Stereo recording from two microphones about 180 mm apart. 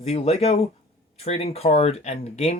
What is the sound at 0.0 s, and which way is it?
Speech, 35° left (ahead or behind).